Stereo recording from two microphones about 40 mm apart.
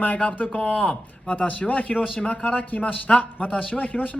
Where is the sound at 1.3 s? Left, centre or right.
Left.